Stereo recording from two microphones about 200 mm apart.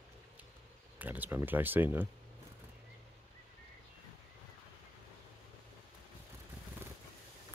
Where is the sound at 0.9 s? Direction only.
10° right (ahead or behind).